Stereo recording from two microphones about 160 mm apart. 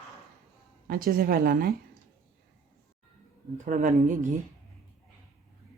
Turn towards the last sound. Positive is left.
turn(degrees=-55)  # may be behind; listen again after turning